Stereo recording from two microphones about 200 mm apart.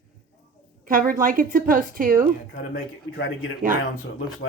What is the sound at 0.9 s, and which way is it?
A woman's voice, 45° right (ahead or behind).